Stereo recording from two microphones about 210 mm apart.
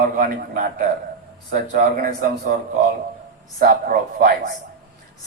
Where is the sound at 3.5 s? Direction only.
40° right (ahead or behind).